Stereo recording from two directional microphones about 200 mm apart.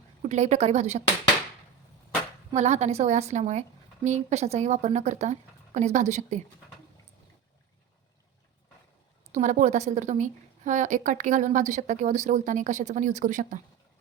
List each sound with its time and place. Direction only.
0.2 s a woman's voice: 35° right (ahead or behind)
2.5 s a woman's voice: 35° right (ahead or behind)
9.3 s a woman's voice: 40° right (ahead or behind)